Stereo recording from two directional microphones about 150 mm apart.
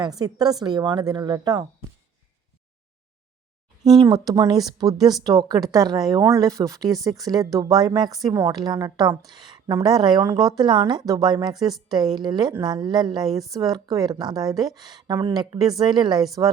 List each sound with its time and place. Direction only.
0.0 s a woman's voice: 25° right (ahead or behind)
3.9 s a woman's voice: 25° right (ahead or behind)